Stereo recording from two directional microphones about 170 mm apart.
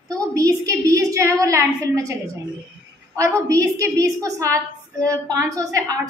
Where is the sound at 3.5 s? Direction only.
20° right (ahead or behind).